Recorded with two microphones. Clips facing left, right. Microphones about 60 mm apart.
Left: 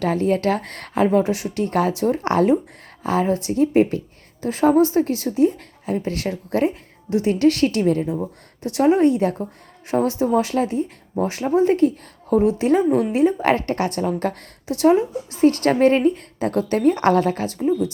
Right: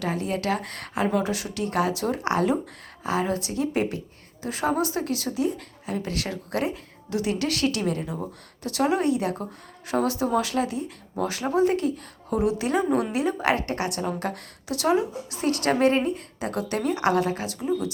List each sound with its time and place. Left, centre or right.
0.0 s a woman's voice: left